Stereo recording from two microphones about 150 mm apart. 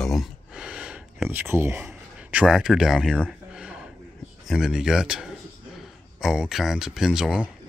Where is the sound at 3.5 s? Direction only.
5° right (ahead or behind).